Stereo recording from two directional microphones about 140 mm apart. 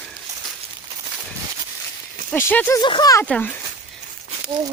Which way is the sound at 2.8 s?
30° left (ahead or behind).